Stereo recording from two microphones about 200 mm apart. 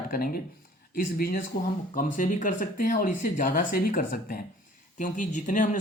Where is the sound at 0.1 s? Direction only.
45° left (ahead or behind).